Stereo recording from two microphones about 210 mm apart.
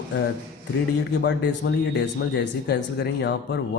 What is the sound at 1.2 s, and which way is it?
Speech, 55° left (ahead or behind).